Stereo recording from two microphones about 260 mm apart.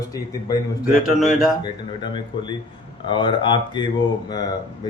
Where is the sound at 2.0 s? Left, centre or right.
Centre.